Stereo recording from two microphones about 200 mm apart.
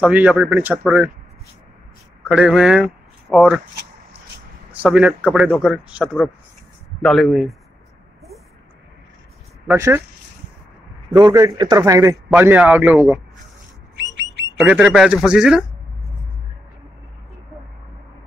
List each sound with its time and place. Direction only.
0.0 s a man's voice: 5° right (ahead or behind)
2.2 s a man's voice: 5° right (ahead or behind)
4.7 s speech: 5° right (ahead or behind)
9.7 s a man's voice: 15° right (ahead or behind)
11.1 s a man's voice: 20° right (ahead or behind)
14.6 s speech: 5° right (ahead or behind)